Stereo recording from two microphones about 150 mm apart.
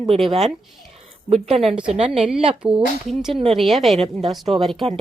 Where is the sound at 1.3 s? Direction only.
40° right (ahead or behind).